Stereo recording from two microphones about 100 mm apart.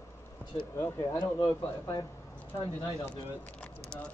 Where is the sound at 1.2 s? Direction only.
45° left (ahead or behind).